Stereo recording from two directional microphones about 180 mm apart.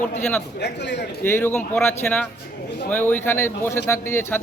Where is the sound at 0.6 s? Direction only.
70° left (ahead or behind).